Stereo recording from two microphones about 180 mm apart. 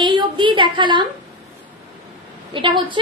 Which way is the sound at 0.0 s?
25° right (ahead or behind).